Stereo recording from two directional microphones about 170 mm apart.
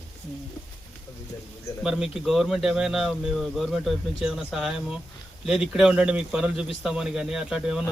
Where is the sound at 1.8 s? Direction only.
5° right (ahead or behind).